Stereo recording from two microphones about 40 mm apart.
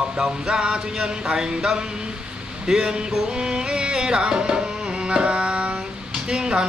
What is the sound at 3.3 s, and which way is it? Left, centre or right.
Music, right.